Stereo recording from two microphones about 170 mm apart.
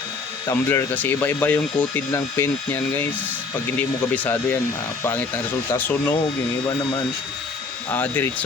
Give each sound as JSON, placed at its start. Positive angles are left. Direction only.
{"t": 0.4, "sound": "speech", "side_deg": 15}
{"t": 3.8, "sound": "speech", "side_deg": 10}
{"t": 5.7, "sound": "speech", "side_deg": 10}
{"t": 7.9, "sound": "speech", "side_deg": 10}